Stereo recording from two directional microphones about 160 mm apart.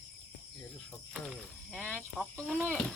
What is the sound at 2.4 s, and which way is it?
Speech, 5° right (ahead or behind).